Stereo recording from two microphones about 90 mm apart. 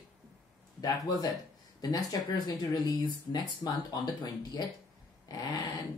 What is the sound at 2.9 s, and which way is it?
Speech, 55° left (ahead or behind).